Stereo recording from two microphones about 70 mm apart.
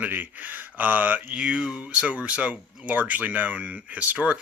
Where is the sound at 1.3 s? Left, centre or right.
Centre.